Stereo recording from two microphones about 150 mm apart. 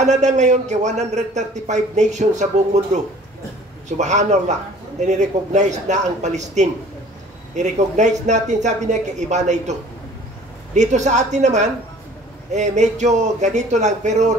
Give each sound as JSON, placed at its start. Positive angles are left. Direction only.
{"t": 0.0, "sound": "a man's voice", "side_deg": -50}